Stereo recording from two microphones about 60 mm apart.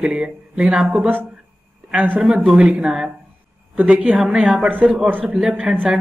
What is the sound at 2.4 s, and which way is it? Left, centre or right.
Speech, centre.